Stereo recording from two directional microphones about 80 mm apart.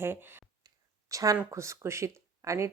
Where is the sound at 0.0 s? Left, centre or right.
Right.